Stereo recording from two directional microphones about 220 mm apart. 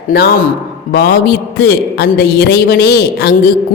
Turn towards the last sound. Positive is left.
turn(degrees=45)  # may be behind; listen again after turning